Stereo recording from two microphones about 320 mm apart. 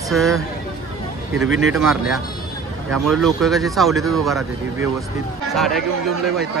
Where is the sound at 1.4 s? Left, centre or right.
Right.